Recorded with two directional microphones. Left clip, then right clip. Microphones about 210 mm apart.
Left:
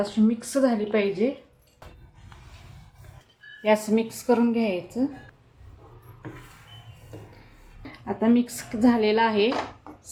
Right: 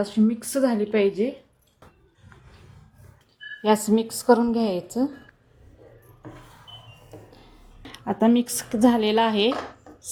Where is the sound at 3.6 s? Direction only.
30° right (ahead or behind).